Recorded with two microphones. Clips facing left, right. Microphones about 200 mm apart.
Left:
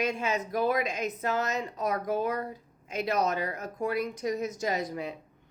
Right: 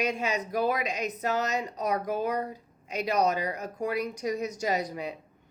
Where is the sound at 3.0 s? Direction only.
50° left (ahead or behind).